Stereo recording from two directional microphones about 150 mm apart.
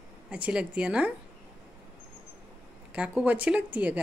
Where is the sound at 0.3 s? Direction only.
5° right (ahead or behind).